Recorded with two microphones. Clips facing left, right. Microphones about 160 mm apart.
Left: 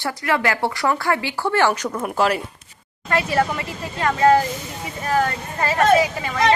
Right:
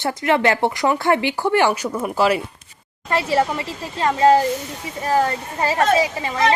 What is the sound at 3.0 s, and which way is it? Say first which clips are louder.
Speech: right 1 dB; 30° right (ahead or behind).